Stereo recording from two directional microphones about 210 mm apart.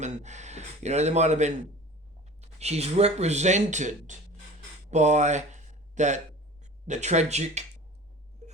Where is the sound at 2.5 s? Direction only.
30° right (ahead or behind).